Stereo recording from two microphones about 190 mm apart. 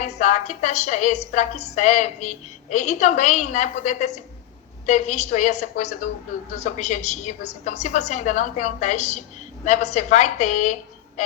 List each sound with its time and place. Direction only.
0.0 s a woman's voice: 40° left (ahead or behind)